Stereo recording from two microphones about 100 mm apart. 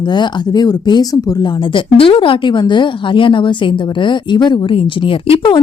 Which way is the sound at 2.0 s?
60° left (ahead or behind).